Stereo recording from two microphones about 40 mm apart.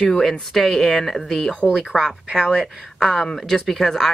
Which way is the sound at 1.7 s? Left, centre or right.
Centre.